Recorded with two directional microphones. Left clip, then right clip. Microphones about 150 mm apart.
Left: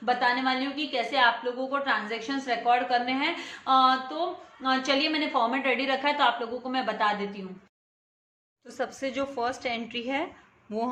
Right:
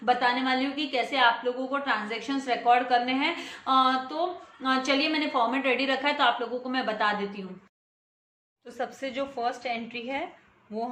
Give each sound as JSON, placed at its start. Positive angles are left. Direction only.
{"t": 0.0, "sound": "a woman's voice", "side_deg": -5}
{"t": 8.6, "sound": "a woman's voice", "side_deg": 20}
{"t": 10.7, "sound": "speech", "side_deg": 55}